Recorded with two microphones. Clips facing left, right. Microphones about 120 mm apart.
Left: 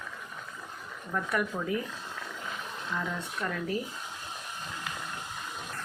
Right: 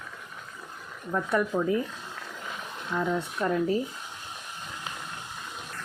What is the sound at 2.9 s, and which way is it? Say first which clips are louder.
Speech: right 7 dB; 25° right (ahead or behind).